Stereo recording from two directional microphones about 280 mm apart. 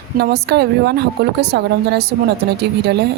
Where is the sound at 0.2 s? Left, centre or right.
Right.